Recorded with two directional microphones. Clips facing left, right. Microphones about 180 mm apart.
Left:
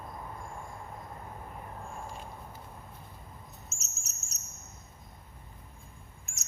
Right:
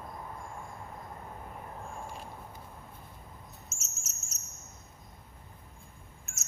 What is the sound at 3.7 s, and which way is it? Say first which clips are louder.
Cricket: even; 35° left (ahead or behind).